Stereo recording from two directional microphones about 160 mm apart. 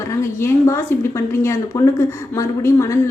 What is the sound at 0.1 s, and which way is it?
A woman's voice, 15° left (ahead or behind).